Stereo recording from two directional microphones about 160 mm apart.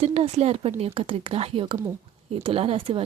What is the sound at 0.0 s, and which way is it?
Speech, 40° right (ahead or behind).